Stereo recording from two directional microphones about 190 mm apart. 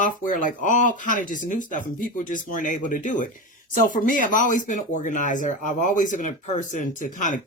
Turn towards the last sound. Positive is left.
turn(degrees=40)  # may be behind; listen again after turning